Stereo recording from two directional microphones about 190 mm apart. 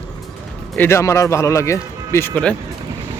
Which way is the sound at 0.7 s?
10° left (ahead or behind).